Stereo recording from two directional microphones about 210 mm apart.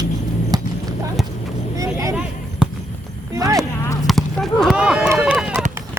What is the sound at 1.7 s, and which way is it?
Vehicle, 15° right (ahead or behind).